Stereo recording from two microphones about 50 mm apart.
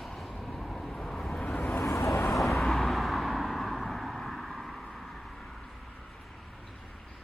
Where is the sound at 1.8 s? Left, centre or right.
Left.